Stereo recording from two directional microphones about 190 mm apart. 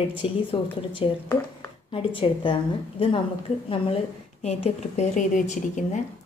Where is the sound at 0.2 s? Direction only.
30° left (ahead or behind).